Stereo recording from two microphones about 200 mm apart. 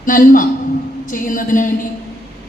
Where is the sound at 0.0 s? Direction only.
40° left (ahead or behind).